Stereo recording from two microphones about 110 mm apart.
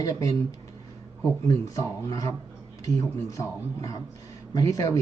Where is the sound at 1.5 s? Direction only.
30° left (ahead or behind).